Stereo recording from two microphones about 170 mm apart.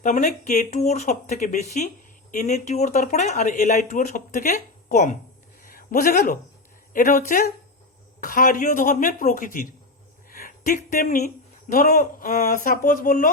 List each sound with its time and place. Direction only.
0.0 s speech: 45° left (ahead or behind)
5.6 s a sound: 55° left (ahead or behind)
6.9 s speech: 50° left (ahead or behind)